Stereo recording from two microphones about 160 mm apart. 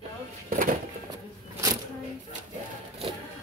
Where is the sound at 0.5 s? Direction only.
60° right (ahead or behind).